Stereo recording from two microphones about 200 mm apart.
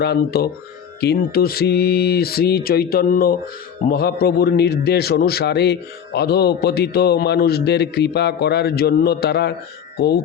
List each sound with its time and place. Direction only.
0.0 s a man's voice: 55° left (ahead or behind)